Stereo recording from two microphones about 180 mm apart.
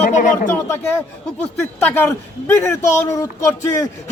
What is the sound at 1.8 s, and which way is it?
Speech, 10° left (ahead or behind).